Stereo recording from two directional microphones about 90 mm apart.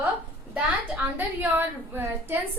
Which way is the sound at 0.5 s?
15° right (ahead or behind).